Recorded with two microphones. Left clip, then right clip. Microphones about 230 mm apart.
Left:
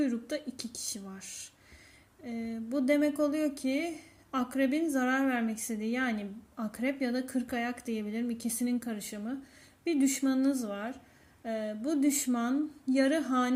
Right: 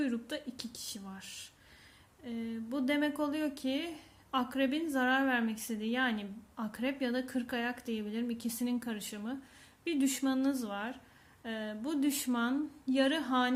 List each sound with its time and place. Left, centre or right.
0.0 s speech: centre
2.6 s speech: centre